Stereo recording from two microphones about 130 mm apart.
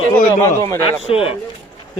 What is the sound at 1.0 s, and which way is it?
Speech, 45° left (ahead or behind).